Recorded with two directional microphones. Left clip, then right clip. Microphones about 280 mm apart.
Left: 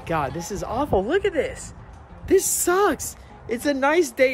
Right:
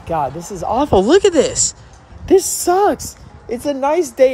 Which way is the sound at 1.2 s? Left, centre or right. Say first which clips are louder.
Right 10 dB; right.